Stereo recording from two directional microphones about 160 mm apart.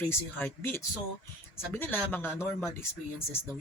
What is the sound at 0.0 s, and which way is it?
Speech, 10° left (ahead or behind).